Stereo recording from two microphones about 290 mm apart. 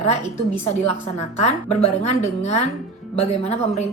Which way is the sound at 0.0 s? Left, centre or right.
Left.